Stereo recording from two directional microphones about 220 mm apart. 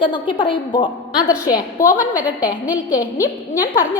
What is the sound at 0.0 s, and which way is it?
A woman's voice, 20° left (ahead or behind).